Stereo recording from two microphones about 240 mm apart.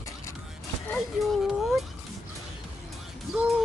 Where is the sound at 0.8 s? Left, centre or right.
Centre.